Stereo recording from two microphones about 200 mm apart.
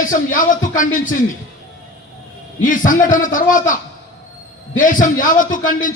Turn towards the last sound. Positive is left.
turn(degrees=40)  # may be behind; listen again after turning